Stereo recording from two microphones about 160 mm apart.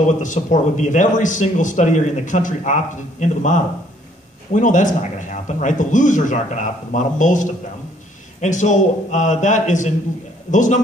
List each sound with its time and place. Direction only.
0.0 s speech: 50° left (ahead or behind)